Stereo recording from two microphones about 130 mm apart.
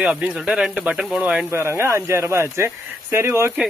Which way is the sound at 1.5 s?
20° right (ahead or behind).